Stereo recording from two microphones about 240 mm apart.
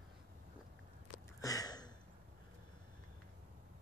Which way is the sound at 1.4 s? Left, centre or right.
Centre.